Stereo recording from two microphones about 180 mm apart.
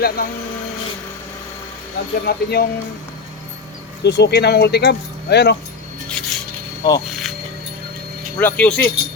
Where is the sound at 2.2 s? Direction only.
60° left (ahead or behind).